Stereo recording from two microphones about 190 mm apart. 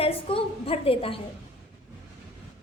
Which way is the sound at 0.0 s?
30° left (ahead or behind).